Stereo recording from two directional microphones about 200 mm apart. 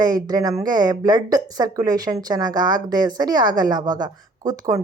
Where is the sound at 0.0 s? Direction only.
20° right (ahead or behind).